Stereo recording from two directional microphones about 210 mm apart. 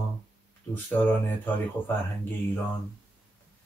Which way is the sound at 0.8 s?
10° left (ahead or behind).